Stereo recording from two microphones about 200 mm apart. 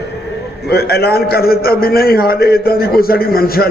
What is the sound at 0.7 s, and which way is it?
A man's voice, 50° left (ahead or behind).